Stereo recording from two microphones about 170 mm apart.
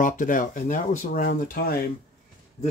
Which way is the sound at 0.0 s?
50° left (ahead or behind).